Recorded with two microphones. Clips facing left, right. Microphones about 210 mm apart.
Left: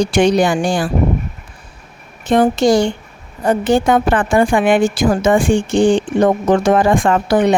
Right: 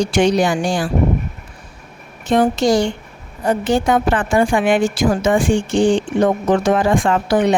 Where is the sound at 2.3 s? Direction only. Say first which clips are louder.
Left 2 dB; 55° left (ahead or behind).